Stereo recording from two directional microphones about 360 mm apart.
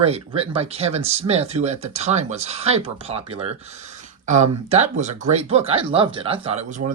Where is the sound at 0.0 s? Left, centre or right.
Centre.